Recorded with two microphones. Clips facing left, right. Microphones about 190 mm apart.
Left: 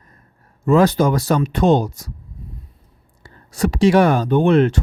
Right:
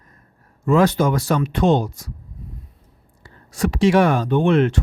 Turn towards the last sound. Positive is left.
turn(degrees=35)  # may be behind; listen again after turning